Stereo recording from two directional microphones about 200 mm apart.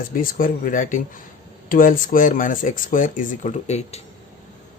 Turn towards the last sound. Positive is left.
turn(degrees=35)  # may be behind; listen again after turning